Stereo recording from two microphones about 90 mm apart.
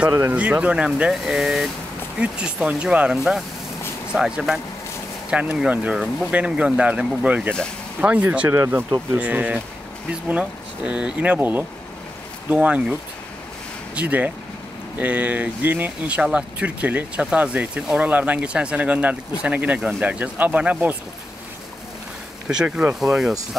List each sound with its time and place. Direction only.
0.3 s speech: 15° right (ahead or behind)
9.1 s speech: 15° right (ahead or behind)
13.9 s speech: 15° right (ahead or behind)
22.5 s speech: 10° right (ahead or behind)